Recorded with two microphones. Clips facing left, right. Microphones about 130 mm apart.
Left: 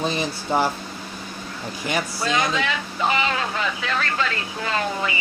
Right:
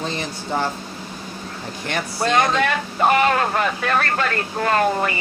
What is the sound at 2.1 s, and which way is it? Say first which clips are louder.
Speech: right 8 dB; 55° right (ahead or behind).